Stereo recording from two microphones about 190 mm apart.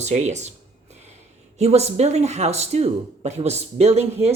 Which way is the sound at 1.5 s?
35° right (ahead or behind).